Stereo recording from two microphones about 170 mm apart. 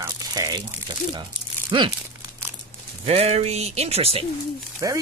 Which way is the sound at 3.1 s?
35° right (ahead or behind).